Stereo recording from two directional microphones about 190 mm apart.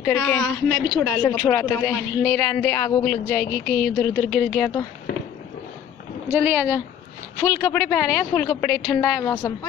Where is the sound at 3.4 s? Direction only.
55° left (ahead or behind).